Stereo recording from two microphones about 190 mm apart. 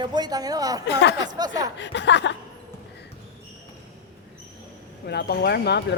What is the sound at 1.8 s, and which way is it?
Speech, 70° left (ahead or behind).